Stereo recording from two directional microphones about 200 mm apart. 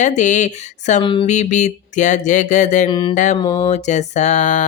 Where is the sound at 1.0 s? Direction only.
25° left (ahead or behind).